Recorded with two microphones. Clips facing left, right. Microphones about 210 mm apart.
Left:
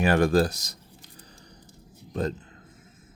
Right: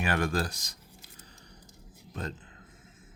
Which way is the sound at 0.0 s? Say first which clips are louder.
Left 9 dB; 35° left (ahead or behind).